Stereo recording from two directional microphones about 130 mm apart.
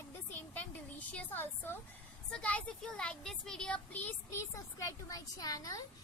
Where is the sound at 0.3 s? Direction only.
15° left (ahead or behind).